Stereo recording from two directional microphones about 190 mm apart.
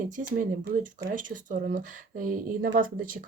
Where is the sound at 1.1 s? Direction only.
45° right (ahead or behind).